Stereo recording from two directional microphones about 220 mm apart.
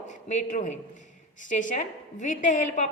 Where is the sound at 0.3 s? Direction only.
35° left (ahead or behind).